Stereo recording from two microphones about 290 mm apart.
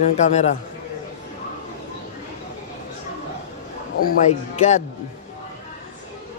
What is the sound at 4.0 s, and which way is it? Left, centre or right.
Speech, left.